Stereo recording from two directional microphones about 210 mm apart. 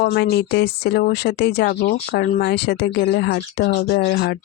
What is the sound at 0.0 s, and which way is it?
Speech, 50° left (ahead or behind).